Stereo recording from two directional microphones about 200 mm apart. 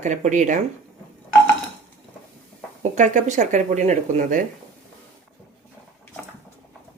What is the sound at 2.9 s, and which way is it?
Speech, 35° right (ahead or behind).